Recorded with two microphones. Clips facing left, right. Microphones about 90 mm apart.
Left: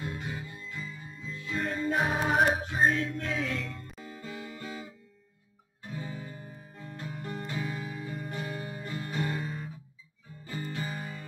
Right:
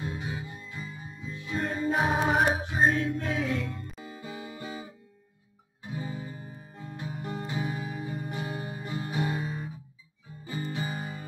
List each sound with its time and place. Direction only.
0.0 s music: 15° right (ahead or behind)
3.8 s music: centre (ahead or behind)
4.1 s music: 15° right (ahead or behind)
5.9 s music: 15° right (ahead or behind)
10.7 s music: 15° right (ahead or behind)